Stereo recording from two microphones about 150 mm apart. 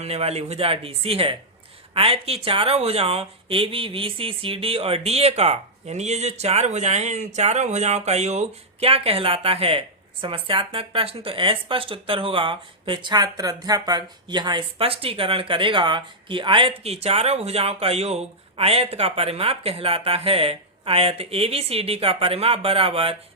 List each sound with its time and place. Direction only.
0.0 s speech: 45° right (ahead or behind)